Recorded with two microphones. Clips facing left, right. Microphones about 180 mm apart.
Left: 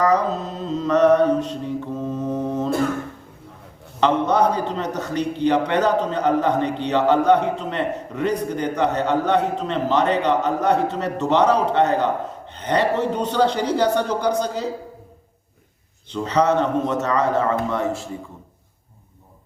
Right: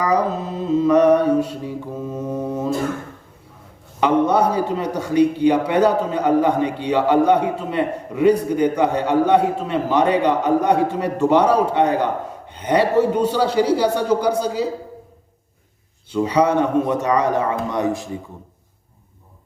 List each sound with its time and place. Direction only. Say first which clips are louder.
0.0 s a man's voice: even; 10° right (ahead or behind)
4.0 s a man's voice: right 2 dB; 10° right (ahead or behind)
16.0 s a man's voice: right 2 dB; 10° right (ahead or behind)